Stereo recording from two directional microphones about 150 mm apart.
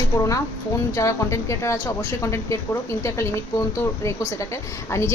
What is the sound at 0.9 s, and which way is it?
A woman's voice, 20° left (ahead or behind).